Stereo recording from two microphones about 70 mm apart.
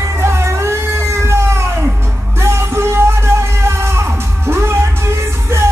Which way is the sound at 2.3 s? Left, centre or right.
Right.